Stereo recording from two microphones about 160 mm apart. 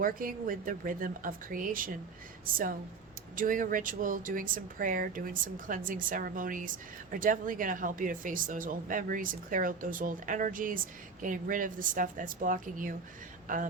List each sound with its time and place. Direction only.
0.0 s speech: 60° right (ahead or behind)
3.3 s speech: 60° right (ahead or behind)